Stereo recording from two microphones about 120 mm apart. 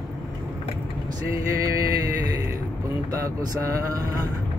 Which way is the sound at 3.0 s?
30° right (ahead or behind).